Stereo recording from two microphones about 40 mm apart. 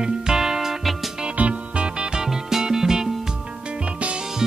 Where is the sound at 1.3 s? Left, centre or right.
Right; by 3.0 s centre.